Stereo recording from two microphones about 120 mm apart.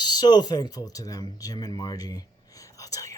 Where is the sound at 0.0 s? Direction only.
35° left (ahead or behind).